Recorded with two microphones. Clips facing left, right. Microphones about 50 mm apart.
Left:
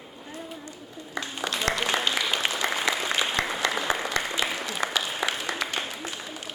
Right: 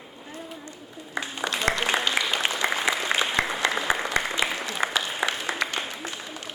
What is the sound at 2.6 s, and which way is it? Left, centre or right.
Applause, centre.